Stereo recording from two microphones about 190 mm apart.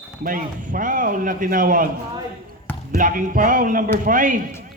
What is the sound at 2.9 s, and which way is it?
Speech, 45° right (ahead or behind).